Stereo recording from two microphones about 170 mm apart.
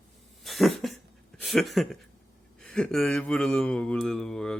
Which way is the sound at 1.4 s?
Centre (ahead or behind).